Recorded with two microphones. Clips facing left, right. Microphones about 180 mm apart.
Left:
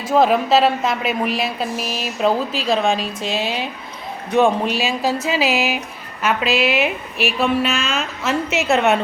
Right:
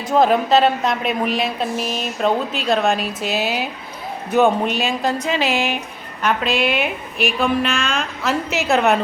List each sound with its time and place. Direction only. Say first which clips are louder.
0.1 s speech: even; centre (ahead or behind)